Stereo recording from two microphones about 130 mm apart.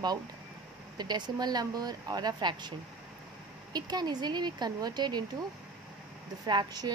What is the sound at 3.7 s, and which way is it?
A woman's voice, 30° right (ahead or behind).